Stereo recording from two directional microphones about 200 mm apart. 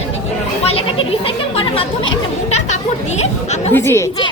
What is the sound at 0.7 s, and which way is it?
A child's voice, 30° left (ahead or behind).